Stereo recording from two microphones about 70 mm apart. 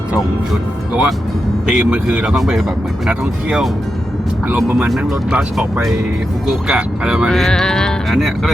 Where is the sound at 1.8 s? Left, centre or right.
Centre.